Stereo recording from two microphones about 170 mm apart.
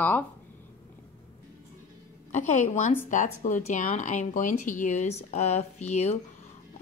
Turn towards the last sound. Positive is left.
turn(degrees=40)  # may be behind; listen again after turning